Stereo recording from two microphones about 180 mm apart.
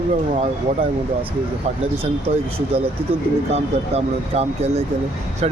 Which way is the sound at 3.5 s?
35° right (ahead or behind).